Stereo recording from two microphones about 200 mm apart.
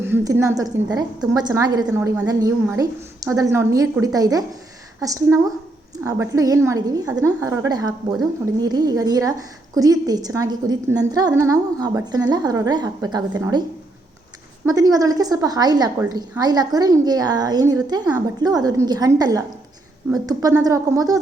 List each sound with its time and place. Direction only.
0.0 s a woman's voice: 10° right (ahead or behind)